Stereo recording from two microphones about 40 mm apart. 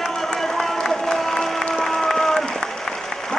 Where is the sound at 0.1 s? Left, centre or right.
Centre.